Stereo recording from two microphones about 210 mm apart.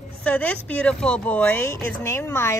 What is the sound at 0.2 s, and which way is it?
A woman's voice, 5° left (ahead or behind).